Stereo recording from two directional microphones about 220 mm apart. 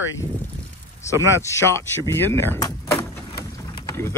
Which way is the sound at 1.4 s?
10° left (ahead or behind).